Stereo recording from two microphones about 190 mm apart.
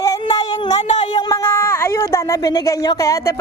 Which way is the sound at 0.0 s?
20° left (ahead or behind).